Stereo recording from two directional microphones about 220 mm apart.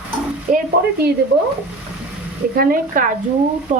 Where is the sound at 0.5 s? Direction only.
35° right (ahead or behind).